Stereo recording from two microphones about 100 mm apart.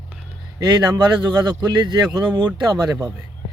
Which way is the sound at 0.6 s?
40° right (ahead or behind).